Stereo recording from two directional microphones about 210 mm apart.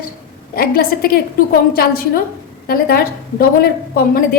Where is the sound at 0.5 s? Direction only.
45° left (ahead or behind).